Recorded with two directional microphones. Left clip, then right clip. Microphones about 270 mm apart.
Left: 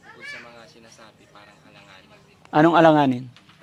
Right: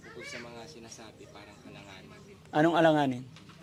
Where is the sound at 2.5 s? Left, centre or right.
Left.